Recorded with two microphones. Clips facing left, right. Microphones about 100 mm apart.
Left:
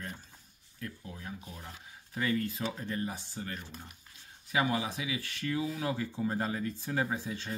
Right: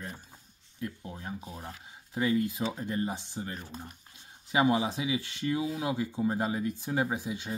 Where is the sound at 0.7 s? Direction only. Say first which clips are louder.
Right 5 dB; 25° right (ahead or behind).